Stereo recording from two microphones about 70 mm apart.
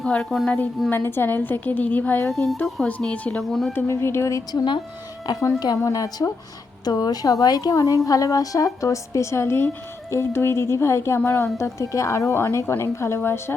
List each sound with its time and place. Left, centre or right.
0.0 s speech: centre
0.9 s a woman's voice: left; by 3.4 s centre
3.4 s speech: centre
3.7 s a woman's voice: left
5.2 s a woman's voice: left
5.8 s a woman's voice: left
6.8 s a woman's voice: left